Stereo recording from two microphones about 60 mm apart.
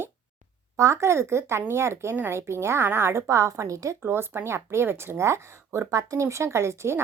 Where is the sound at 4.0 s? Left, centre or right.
Right.